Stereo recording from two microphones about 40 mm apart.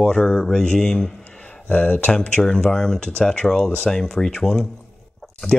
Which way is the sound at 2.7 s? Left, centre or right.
Centre.